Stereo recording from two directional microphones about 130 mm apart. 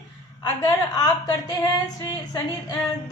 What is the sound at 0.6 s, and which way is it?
A woman's voice, 25° left (ahead or behind).